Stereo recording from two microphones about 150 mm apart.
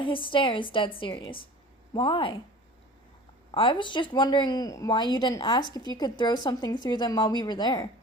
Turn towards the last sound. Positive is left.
turn(degrees=25)  # may be behind; listen again after turning